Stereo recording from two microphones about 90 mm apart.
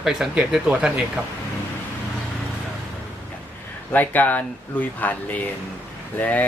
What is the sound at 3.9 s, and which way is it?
Speech, 20° left (ahead or behind).